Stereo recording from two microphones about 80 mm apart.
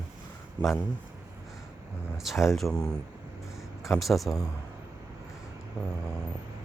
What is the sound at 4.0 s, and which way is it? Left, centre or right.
Speech, centre.